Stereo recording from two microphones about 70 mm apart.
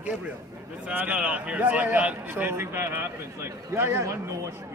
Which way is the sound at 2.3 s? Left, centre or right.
Right.